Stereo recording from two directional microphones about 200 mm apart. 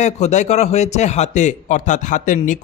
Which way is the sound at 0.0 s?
35° left (ahead or behind).